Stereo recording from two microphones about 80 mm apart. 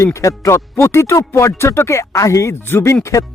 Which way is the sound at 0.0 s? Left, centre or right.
Left.